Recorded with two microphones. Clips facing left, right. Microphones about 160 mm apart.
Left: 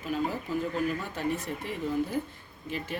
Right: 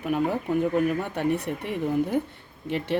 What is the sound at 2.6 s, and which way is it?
Speech, 70° right (ahead or behind).